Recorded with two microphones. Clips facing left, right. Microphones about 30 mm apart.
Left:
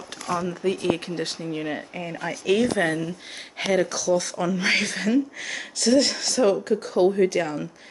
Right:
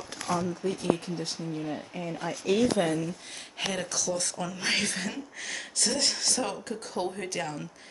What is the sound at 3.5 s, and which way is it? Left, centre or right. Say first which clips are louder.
Speech: left 9 dB; centre.